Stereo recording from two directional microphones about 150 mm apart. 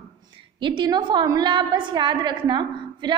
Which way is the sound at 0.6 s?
30° right (ahead or behind).